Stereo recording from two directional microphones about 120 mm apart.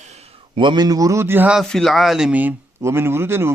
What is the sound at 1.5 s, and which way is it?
Speech, centre (ahead or behind).